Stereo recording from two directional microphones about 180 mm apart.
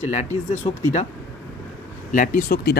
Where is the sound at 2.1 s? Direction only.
45° left (ahead or behind).